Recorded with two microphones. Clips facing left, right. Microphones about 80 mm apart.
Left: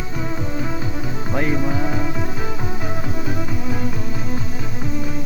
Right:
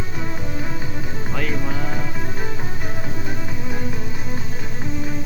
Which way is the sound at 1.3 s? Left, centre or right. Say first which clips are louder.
Left 6 dB; left.